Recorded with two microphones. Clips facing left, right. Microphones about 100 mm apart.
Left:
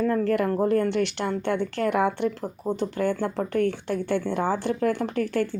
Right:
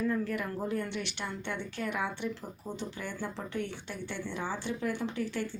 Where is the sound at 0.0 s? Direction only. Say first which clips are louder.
Left 9 dB; 60° left (ahead or behind).